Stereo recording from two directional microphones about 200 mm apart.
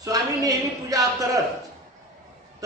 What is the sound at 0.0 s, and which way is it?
A woman's voice, 15° right (ahead or behind).